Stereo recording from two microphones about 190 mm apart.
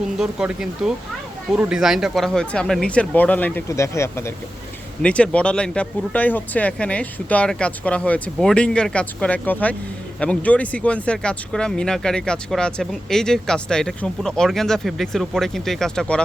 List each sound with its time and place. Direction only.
0.2 s speech: 5° right (ahead or behind)